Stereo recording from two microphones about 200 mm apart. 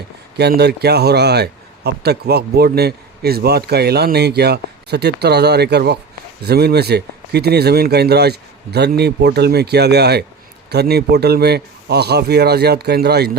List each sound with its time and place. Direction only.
0.3 s a man's voice: 55° right (ahead or behind)